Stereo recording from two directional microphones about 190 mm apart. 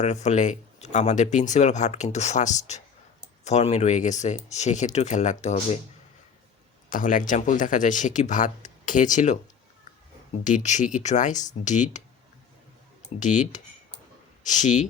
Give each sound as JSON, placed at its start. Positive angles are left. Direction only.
{"t": 0.0, "sound": "speech", "side_deg": 35}
{"t": 6.9, "sound": "speech", "side_deg": 45}
{"t": 10.4, "sound": "speech", "side_deg": 40}
{"t": 13.1, "sound": "speech", "side_deg": 40}